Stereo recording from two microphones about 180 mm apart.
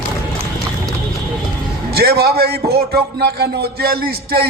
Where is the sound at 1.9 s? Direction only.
60° right (ahead or behind).